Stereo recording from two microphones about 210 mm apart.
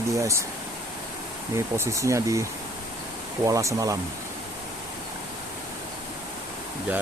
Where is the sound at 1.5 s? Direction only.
15° right (ahead or behind).